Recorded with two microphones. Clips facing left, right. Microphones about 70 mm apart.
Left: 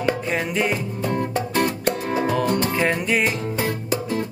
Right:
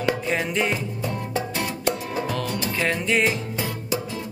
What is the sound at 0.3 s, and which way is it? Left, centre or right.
Music, centre.